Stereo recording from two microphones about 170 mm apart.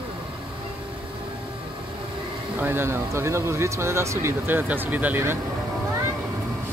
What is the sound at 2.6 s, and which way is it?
Speech, 15° right (ahead or behind).